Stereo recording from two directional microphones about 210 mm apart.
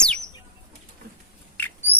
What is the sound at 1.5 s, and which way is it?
Rodents, 10° left (ahead or behind).